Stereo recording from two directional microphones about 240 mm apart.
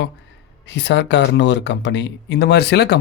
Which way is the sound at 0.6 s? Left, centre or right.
Left.